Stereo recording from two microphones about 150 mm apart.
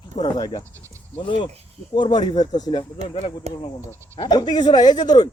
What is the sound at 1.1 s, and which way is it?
A man's voice, 35° left (ahead or behind).